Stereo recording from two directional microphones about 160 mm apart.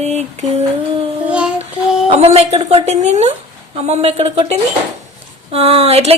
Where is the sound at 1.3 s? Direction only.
5° right (ahead or behind).